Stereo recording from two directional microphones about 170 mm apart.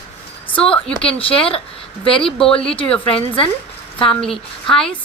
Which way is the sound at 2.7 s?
30° left (ahead or behind).